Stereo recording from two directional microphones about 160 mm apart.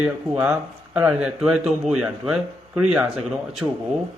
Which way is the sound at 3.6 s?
15° right (ahead or behind).